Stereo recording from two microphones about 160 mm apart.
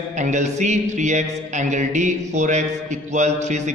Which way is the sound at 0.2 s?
45° right (ahead or behind).